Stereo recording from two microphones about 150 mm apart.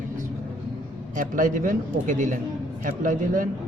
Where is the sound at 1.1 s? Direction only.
60° right (ahead or behind).